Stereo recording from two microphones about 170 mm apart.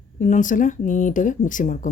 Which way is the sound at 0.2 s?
50° left (ahead or behind).